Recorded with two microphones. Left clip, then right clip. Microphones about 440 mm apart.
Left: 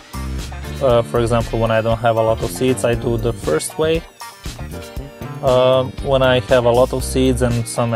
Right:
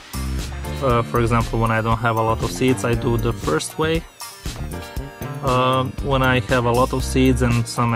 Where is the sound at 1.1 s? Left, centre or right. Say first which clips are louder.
Left 3 dB; centre.